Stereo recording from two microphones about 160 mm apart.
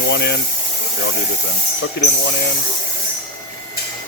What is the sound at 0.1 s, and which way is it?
Speech, 90° left.